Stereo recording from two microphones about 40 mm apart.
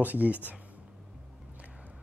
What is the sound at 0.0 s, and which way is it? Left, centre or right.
Speech, right.